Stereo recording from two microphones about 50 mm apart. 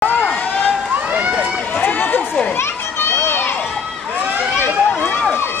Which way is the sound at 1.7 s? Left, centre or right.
Left.